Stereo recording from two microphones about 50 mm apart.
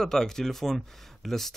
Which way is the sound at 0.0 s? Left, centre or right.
Centre.